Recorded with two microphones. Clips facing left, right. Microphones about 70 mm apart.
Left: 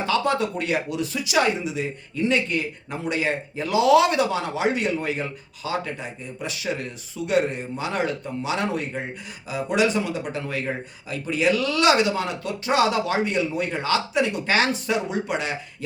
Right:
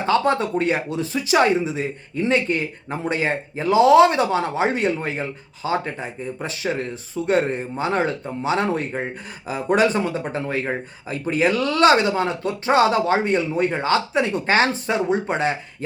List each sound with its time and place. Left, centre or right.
0.0 s speech: right